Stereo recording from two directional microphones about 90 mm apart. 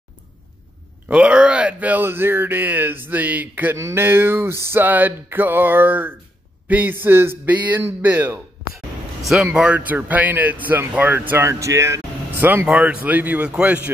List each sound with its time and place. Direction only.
1.0 s speech: 10° right (ahead or behind)
3.7 s speech: 30° right (ahead or behind)
9.4 s speech: 15° right (ahead or behind); by 12.4 s 35° right (ahead or behind)
12.6 s a man's voice: 15° right (ahead or behind)